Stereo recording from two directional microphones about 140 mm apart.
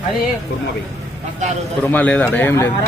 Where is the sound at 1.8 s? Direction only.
10° left (ahead or behind).